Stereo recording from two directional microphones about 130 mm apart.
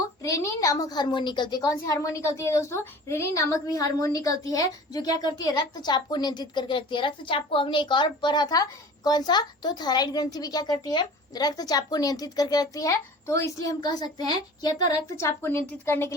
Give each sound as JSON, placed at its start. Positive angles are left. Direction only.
{"t": 0.2, "sound": "a woman's voice", "side_deg": 25}